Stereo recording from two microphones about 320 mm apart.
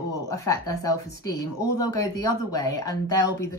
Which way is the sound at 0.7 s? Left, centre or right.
Left.